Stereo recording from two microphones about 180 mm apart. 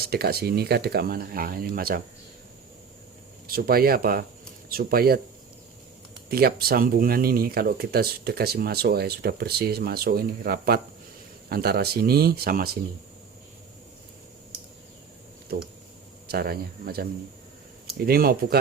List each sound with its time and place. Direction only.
0.1 s speech: 60° right (ahead or behind)
3.4 s speech: 55° right (ahead or behind)
6.2 s speech: 60° right (ahead or behind)
16.3 s speech: 60° right (ahead or behind)